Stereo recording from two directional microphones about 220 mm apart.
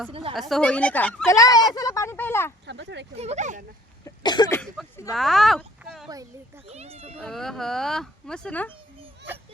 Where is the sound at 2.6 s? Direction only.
50° right (ahead or behind).